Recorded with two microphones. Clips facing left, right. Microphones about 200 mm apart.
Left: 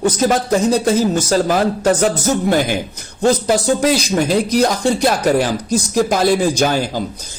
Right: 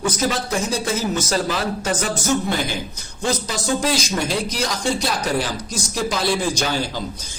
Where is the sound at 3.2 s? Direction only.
60° left (ahead or behind).